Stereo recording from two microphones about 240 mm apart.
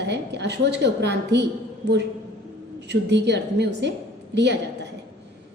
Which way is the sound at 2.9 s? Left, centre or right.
Right.